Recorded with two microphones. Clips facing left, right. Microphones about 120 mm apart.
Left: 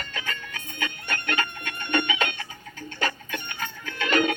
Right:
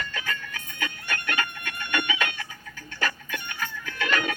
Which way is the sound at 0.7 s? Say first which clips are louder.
Left 1 dB; 20° left (ahead or behind).